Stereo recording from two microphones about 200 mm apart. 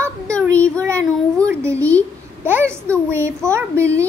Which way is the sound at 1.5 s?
15° right (ahead or behind).